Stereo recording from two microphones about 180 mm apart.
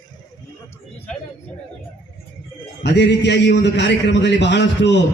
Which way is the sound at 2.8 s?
70° left (ahead or behind).